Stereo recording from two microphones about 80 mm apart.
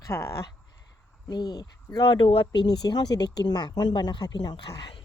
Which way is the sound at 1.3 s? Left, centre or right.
Left.